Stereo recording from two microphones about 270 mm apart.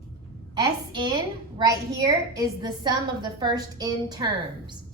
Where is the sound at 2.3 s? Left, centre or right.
Centre.